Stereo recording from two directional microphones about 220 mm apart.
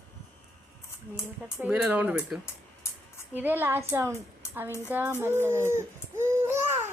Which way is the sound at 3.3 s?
10° right (ahead or behind).